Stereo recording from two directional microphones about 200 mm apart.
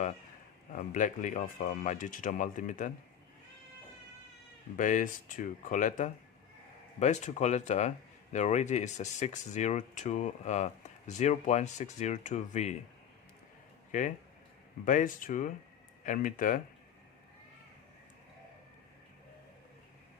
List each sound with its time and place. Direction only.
0.7 s speech: 40° left (ahead or behind)
4.8 s speech: 40° left (ahead or behind)
13.9 s speech: 40° left (ahead or behind)